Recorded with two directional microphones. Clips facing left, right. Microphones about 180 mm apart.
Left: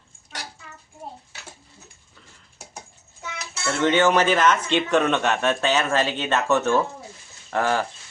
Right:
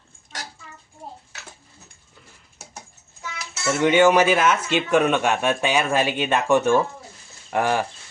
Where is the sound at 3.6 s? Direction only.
10° right (ahead or behind).